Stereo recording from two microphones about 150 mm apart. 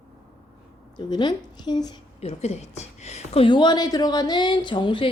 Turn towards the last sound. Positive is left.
turn(degrees=35)  # may be behind; listen again after turning